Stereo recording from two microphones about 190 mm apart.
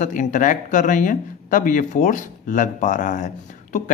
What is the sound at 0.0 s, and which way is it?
Speech, 40° left (ahead or behind).